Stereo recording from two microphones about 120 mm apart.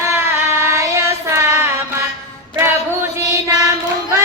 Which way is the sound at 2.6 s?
20° right (ahead or behind).